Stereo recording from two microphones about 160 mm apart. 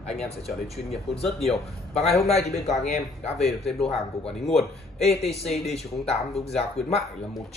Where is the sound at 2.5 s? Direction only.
45° left (ahead or behind).